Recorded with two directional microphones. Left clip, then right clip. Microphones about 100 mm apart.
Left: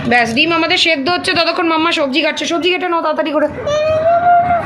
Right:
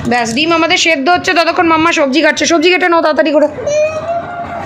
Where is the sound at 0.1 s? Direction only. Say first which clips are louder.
Even; 25° right (ahead or behind).